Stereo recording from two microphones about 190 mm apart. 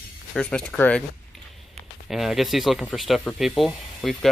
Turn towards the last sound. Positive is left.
turn(degrees=0)  # may be behind; listen again after turning